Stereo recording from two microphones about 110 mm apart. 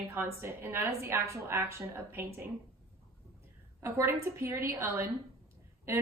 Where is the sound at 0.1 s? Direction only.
25° right (ahead or behind).